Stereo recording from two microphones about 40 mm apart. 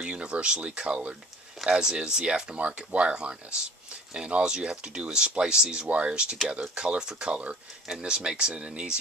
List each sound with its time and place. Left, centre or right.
0.0 s speech: right
8.0 s speech: centre